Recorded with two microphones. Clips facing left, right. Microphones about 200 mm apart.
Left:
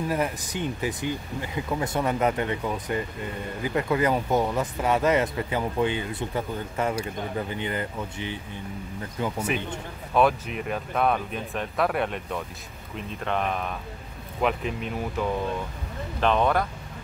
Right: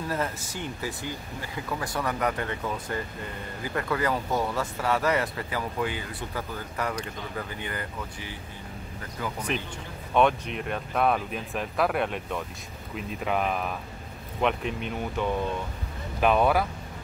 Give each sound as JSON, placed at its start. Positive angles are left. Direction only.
{"t": 0.1, "sound": "speech", "side_deg": 15}
{"t": 10.1, "sound": "speech", "side_deg": 5}